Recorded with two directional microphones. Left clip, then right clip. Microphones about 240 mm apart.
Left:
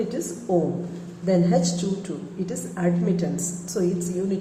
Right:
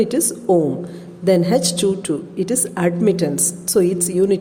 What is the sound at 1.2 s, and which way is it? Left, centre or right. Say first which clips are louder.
A woman's voice: right 6 dB; right.